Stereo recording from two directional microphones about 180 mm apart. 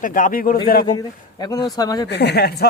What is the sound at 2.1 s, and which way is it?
Speech, 65° left (ahead or behind).